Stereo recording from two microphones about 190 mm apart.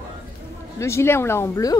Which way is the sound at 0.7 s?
15° left (ahead or behind).